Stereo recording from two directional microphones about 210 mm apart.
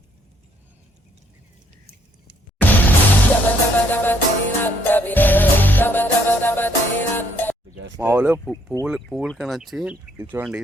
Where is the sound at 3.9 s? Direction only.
10° left (ahead or behind).